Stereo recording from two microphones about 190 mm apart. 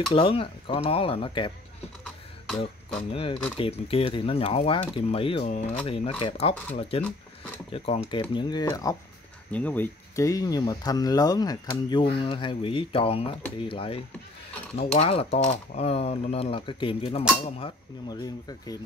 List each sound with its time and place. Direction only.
0.1 s speech: 30° left (ahead or behind)
3.0 s speech: 30° left (ahead or behind)
9.5 s speech: 10° left (ahead or behind)